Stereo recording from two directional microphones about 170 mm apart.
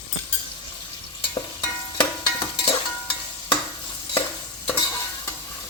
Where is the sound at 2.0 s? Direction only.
25° left (ahead or behind).